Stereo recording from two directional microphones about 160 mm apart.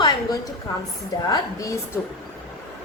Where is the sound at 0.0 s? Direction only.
25° left (ahead or behind).